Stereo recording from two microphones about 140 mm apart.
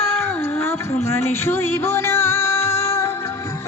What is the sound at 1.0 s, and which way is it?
Music, 15° left (ahead or behind).